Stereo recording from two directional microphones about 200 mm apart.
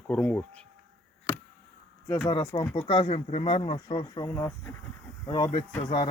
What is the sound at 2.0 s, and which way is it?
Speech, 15° left (ahead or behind).